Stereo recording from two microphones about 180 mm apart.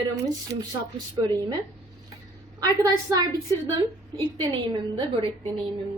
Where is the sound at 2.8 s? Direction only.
20° right (ahead or behind).